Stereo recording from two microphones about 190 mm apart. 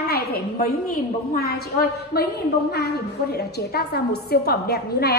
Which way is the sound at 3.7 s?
55° left (ahead or behind).